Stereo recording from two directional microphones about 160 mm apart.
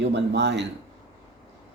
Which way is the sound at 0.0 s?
90° right.